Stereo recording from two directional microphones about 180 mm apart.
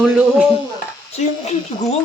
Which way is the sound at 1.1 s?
40° left (ahead or behind).